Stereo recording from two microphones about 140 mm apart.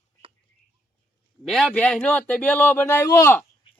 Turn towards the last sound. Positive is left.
turn(degrees=20)  # may be behind; listen again after turning